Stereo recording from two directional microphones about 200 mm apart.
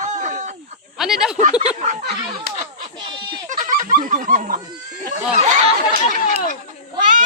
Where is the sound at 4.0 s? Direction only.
40° right (ahead or behind).